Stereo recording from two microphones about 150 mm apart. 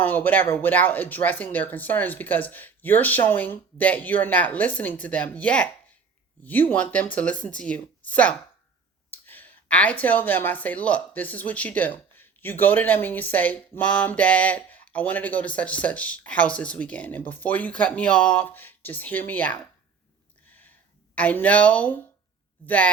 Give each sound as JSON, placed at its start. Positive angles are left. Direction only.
{"t": 0.0, "sound": "speech", "side_deg": 10}
{"t": 20.5, "sound": "a sound", "side_deg": 10}
{"t": 21.2, "sound": "speech", "side_deg": 10}